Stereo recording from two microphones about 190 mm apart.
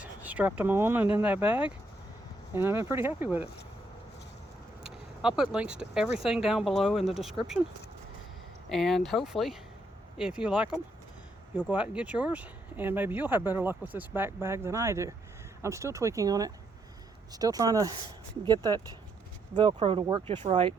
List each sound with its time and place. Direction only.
0.0 s speech: 10° right (ahead or behind)
4.8 s vehicle: 5° right (ahead or behind)
5.9 s speech: 5° right (ahead or behind)
8.7 s speech: centre (ahead or behind); by 20.7 s 25° right (ahead or behind)